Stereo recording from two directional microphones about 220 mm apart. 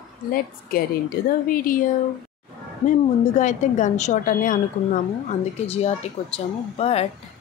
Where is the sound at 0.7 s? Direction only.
40° left (ahead or behind).